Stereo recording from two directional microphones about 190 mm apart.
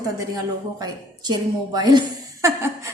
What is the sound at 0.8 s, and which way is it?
A woman's voice, 20° right (ahead or behind).